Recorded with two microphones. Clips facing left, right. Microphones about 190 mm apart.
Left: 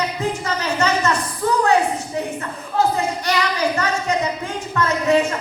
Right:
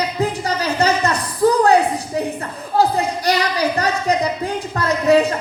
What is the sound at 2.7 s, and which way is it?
Speech, 35° right (ahead or behind).